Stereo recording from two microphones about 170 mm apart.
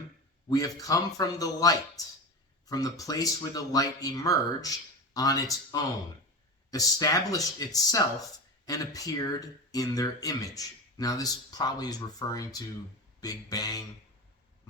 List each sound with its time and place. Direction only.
0.5 s speech: 20° left (ahead or behind)